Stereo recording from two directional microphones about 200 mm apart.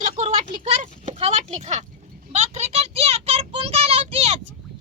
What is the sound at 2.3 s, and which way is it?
Child singing, 35° right (ahead or behind).